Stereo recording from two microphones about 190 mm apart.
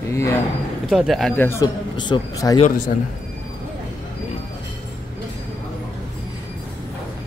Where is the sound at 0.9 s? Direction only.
Centre (ahead or behind); by 2.5 s 20° left (ahead or behind).